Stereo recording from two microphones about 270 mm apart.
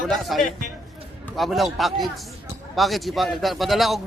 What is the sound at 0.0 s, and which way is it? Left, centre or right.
Speech, centre.